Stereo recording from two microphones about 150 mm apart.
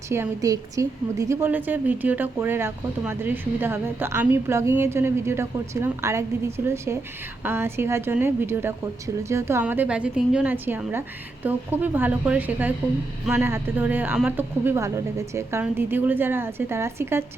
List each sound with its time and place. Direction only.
0.1 s a woman's voice: 20° right (ahead or behind)